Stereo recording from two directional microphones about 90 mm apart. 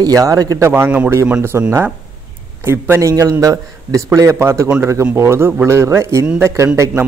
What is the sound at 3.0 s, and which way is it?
A man's voice, 40° right (ahead or behind).